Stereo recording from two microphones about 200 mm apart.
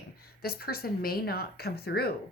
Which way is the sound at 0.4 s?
50° left (ahead or behind).